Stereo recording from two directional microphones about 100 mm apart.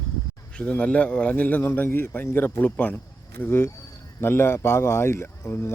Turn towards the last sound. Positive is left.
turn(degrees=25)  # may be behind; listen again after turning